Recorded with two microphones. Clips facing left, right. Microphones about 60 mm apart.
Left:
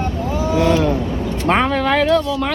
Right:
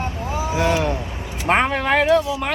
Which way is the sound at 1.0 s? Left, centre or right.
Centre.